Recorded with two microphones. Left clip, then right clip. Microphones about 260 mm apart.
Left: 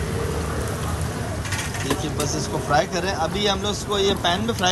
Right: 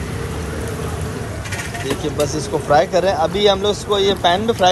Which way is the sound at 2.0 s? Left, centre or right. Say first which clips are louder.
Right 6 dB; centre.